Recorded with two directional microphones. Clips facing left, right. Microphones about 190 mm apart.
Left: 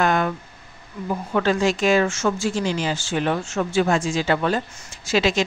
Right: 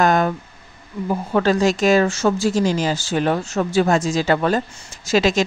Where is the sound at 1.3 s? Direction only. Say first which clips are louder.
Right 3 dB; 40° right (ahead or behind).